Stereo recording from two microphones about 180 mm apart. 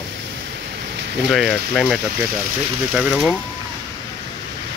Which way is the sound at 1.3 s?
Centre (ahead or behind).